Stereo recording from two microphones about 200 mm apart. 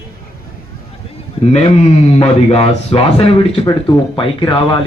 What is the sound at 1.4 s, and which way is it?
A man's voice, 30° left (ahead or behind).